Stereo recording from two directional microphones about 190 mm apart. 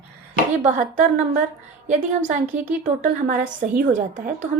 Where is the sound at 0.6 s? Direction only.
40° right (ahead or behind).